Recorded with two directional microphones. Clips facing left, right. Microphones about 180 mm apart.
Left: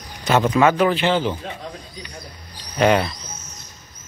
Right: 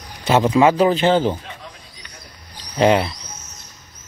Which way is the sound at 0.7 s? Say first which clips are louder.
Right 3 dB; 35° right (ahead or behind).